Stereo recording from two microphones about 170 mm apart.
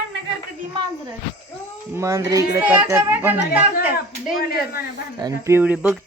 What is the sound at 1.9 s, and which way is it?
Speech, 15° right (ahead or behind).